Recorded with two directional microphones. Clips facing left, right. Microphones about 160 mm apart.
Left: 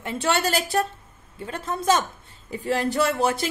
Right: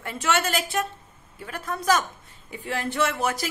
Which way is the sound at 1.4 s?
25° left (ahead or behind).